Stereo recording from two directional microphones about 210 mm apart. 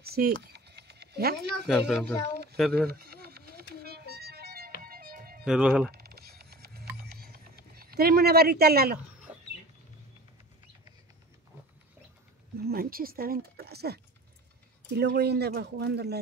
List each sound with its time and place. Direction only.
0.0 s speech: 45° right (ahead or behind)
0.5 s a sound: 50° right (ahead or behind)
1.7 s speech: centre (ahead or behind)
2.9 s a sound: 45° right (ahead or behind)
3.8 s music: 50° right (ahead or behind)
5.4 s speech: 5° right (ahead or behind)
5.9 s music: 45° right (ahead or behind)
7.0 s a sound: 45° right (ahead or behind)
12.6 s speech: 45° right (ahead or behind)